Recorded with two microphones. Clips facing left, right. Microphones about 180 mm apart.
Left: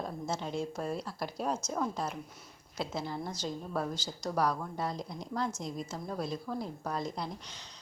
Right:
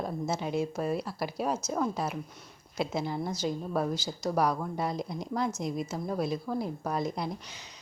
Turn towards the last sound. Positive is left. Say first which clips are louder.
# right 4 dB
turn(degrees=-10)  # may be behind; listen again after turning